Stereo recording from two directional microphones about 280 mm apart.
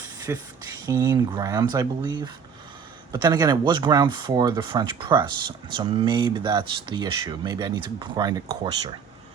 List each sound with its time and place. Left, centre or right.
0.3 s speech: centre